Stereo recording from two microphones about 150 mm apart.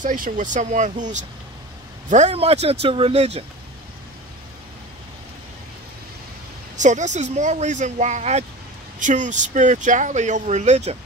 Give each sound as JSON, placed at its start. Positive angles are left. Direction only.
{"t": 0.0, "sound": "speech", "side_deg": -60}
{"t": 6.8, "sound": "speech", "side_deg": -55}